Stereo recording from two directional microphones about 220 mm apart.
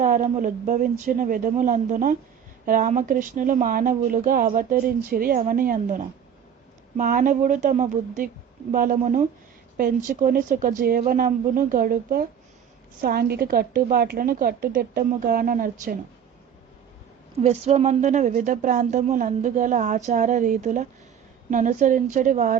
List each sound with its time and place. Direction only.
0.0 s speech: 35° right (ahead or behind)
17.4 s speech: 30° right (ahead or behind)